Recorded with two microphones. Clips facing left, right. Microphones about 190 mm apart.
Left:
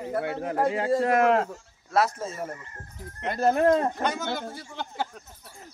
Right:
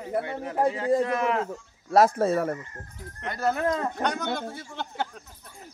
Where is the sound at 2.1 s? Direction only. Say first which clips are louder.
Right 10 dB; 70° right (ahead or behind).